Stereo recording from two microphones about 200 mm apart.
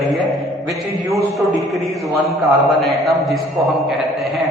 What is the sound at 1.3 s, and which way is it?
A man's voice, centre (ahead or behind).